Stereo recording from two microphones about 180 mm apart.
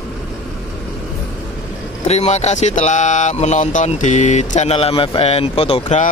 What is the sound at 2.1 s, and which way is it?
Speech, 40° left (ahead or behind).